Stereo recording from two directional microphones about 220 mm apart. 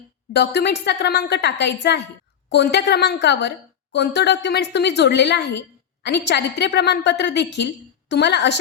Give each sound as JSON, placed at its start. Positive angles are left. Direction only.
{"t": 0.3, "sound": "a woman's voice", "side_deg": 50}